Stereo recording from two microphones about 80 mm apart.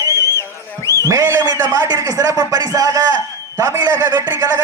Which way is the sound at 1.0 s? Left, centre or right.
Right.